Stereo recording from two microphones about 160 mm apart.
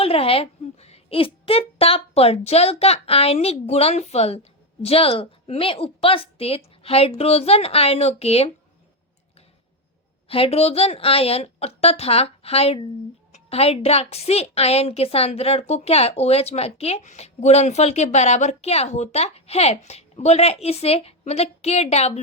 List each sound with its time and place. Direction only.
0.0 s a woman's voice: 35° left (ahead or behind)
10.2 s a woman's voice: 35° left (ahead or behind)